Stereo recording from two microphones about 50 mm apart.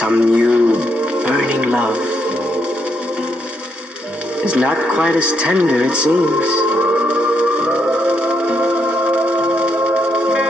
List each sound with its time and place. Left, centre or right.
0.0 s radio: right
1.2 s music: right
4.4 s speech: right
4.9 s music: right